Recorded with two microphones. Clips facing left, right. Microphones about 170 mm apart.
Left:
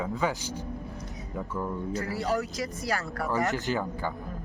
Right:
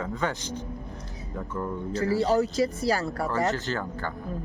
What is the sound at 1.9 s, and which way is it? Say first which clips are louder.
Speech: right 8 dB; 30° right (ahead or behind).